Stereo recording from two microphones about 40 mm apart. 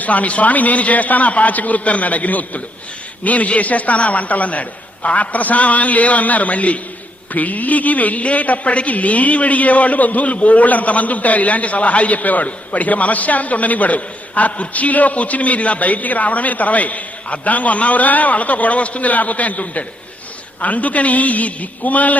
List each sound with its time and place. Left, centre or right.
0.0 s a woman's voice: left